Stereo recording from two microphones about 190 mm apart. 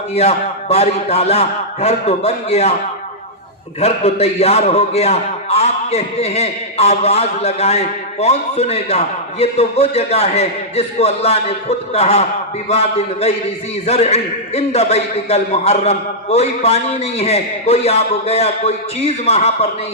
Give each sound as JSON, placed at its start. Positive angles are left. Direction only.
{"t": 0.1, "sound": "a man's voice", "side_deg": 35}
{"t": 3.8, "sound": "a man's voice", "side_deg": 35}